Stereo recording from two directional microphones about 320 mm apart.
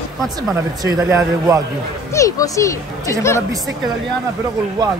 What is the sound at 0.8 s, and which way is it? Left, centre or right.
Speech, centre.